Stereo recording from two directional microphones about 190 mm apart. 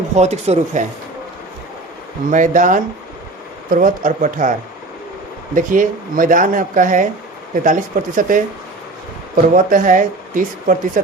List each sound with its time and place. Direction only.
0.2 s speech: 35° right (ahead or behind)
2.3 s speech: 40° right (ahead or behind)
5.5 s speech: 45° right (ahead or behind)